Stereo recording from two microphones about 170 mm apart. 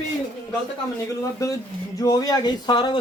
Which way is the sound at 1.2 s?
20° left (ahead or behind).